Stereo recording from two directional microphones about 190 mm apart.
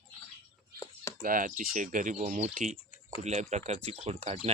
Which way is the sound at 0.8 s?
15° left (ahead or behind).